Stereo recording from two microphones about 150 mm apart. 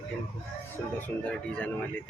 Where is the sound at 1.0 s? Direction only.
10° left (ahead or behind).